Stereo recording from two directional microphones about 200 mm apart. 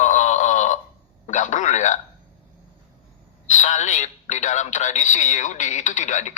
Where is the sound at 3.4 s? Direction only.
35° left (ahead or behind).